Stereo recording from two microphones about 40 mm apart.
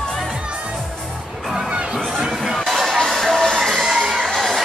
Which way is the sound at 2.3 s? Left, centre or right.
Centre.